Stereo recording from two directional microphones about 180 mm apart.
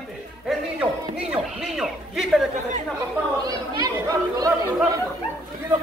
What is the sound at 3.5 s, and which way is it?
Speech, 20° right (ahead or behind).